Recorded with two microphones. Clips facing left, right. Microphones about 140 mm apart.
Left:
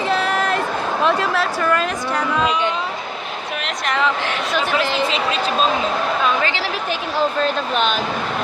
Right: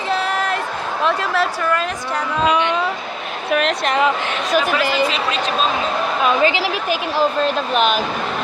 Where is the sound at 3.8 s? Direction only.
20° right (ahead or behind).